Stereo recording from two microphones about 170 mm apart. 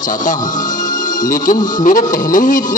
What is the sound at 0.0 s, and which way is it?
A man's voice, 50° left (ahead or behind).